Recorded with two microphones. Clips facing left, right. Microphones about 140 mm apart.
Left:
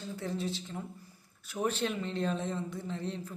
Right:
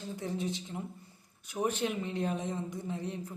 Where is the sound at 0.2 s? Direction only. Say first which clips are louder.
Even; 15° right (ahead or behind).